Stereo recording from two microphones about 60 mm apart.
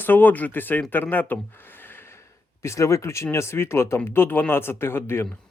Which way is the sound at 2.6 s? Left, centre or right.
Left.